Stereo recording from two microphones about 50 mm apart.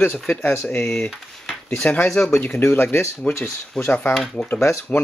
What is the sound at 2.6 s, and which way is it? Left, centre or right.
Speech, left.